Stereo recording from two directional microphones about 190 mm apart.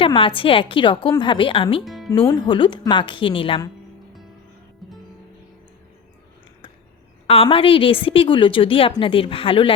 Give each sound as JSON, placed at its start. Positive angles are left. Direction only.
{"t": 0.0, "sound": "a woman's voice", "side_deg": 25}
{"t": 1.8, "sound": "music", "side_deg": 0}
{"t": 2.1, "sound": "a woman's voice", "side_deg": 20}
{"t": 7.3, "sound": "a woman's voice", "side_deg": 30}